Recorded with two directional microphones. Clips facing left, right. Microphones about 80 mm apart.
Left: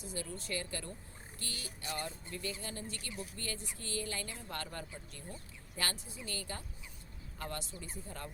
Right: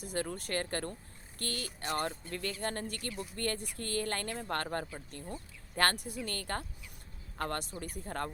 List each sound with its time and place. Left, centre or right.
0.0 s speech: right